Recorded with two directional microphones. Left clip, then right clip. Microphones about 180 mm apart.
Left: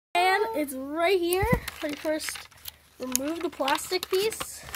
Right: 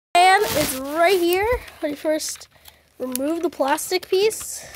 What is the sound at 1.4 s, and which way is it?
Speech, 40° right (ahead or behind).